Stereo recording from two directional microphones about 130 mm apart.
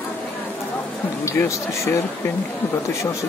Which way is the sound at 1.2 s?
20° left (ahead or behind).